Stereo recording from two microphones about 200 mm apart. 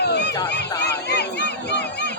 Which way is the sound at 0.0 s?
55° left (ahead or behind).